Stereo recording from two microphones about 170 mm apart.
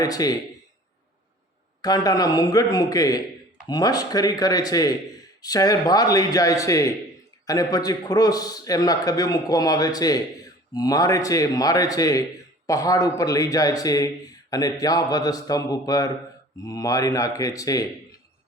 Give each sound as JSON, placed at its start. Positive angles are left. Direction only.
{"t": 0.0, "sound": "a man's voice", "side_deg": 20}
{"t": 1.8, "sound": "a man's voice", "side_deg": 20}